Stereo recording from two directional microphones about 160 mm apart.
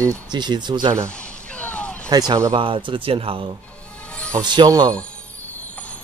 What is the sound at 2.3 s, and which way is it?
Speech, 25° right (ahead or behind).